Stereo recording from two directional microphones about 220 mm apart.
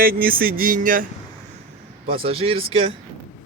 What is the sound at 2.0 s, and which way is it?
Speech, 25° right (ahead or behind).